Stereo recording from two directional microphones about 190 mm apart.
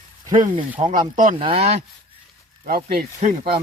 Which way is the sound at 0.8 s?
25° right (ahead or behind).